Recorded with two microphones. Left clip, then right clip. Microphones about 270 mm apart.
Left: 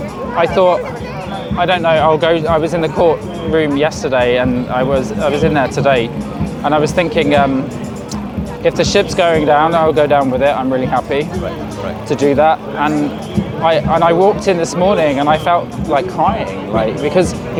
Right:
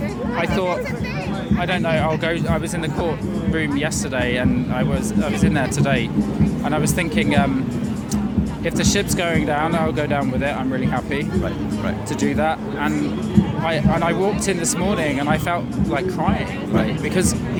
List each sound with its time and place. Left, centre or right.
0.3 s speech: left
8.6 s speech: left